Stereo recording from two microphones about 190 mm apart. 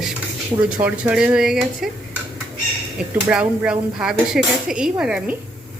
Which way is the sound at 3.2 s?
10° right (ahead or behind).